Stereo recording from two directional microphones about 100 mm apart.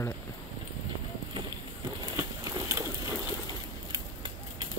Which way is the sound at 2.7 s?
25° right (ahead or behind).